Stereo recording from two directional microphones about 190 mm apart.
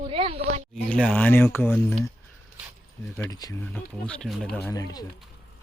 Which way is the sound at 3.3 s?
20° left (ahead or behind).